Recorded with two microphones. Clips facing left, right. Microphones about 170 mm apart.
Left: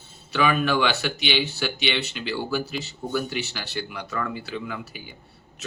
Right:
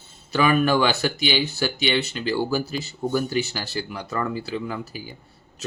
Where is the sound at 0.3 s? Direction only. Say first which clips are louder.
Right 3 dB; 40° right (ahead or behind).